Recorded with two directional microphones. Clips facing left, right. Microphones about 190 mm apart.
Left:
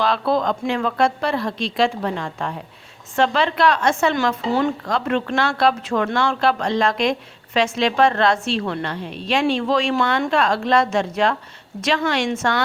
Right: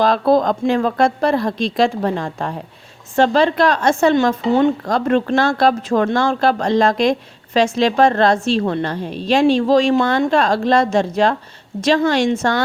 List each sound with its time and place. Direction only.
0.0 s a woman's voice: 45° right (ahead or behind)